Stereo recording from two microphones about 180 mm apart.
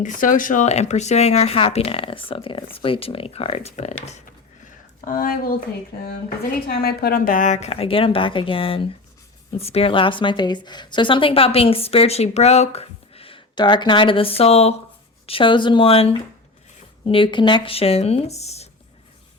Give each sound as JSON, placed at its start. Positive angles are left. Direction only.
{"t": 0.0, "sound": "a woman's voice", "side_deg": 45}
{"t": 4.9, "sound": "speech", "side_deg": 50}
{"t": 6.7, "sound": "a woman's voice", "side_deg": 60}